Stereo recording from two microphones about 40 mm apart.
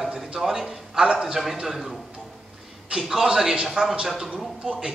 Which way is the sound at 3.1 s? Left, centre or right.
Centre.